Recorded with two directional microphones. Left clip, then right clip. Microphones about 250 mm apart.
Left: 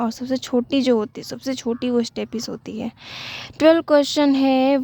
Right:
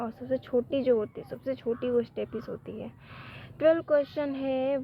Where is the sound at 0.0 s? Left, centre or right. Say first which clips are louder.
Left 7 dB; left.